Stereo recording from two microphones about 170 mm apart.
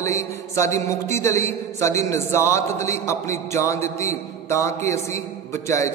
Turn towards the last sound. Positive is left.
turn(degrees=15)  # may be behind; listen again after turning